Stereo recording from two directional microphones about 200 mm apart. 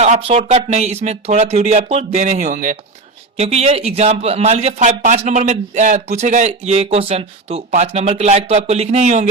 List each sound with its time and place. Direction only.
0.0 s speech: 30° right (ahead or behind)